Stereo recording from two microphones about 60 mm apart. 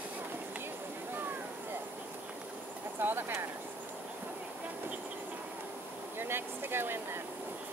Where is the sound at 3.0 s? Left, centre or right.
Right.